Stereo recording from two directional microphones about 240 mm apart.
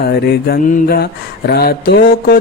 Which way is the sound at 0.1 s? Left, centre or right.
Left.